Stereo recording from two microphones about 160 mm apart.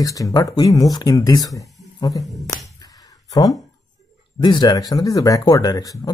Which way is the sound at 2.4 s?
20° left (ahead or behind).